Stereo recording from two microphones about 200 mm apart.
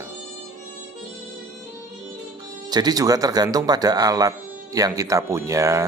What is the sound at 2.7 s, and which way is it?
Speech, 20° right (ahead or behind).